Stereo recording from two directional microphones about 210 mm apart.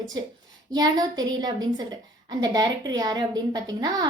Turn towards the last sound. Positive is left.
turn(degrees=-20)  # may be behind; listen again after turning